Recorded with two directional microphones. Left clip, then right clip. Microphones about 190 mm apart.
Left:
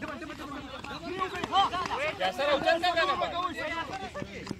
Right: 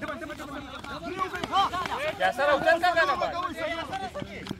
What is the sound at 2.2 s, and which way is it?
Speech, 30° right (ahead or behind).